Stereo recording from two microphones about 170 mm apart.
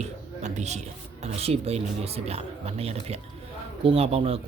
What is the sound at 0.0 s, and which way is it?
A man's voice, 40° right (ahead or behind).